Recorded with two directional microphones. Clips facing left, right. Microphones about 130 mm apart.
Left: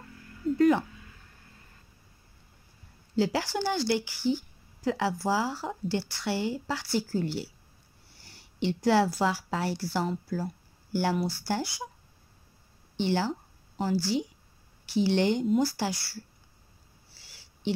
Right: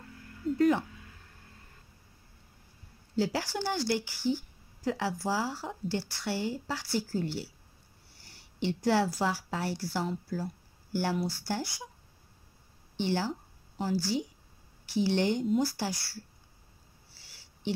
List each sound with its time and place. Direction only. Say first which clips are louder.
0.6 s a woman's voice: left 3 dB; 90° left
3.2 s a woman's voice: left 3 dB; 90° left
8.5 s a woman's voice: left 3 dB; 90° left
12.9 s a woman's voice: left 3 dB; 90° left
14.9 s a woman's voice: left 3 dB; 90° left; by 16.2 s 70° left (ahead or behind)